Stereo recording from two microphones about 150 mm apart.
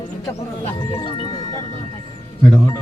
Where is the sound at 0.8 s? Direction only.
35° left (ahead or behind).